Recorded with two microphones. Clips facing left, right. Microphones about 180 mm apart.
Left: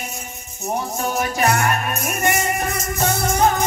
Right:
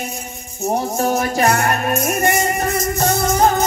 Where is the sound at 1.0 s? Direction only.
40° right (ahead or behind).